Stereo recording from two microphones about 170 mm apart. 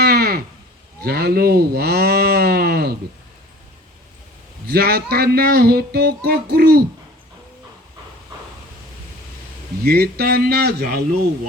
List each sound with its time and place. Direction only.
0.0 s a sound: 70° right (ahead or behind)
1.0 s speech: 65° right (ahead or behind)
4.6 s speech: 65° right (ahead or behind)
9.8 s a man's voice: 65° right (ahead or behind)